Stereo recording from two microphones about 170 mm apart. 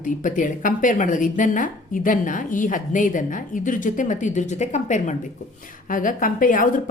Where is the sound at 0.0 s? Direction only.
50° left (ahead or behind).